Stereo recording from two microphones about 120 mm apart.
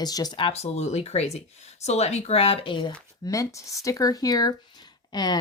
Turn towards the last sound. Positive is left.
turn(degrees=35)  # may be behind; listen again after turning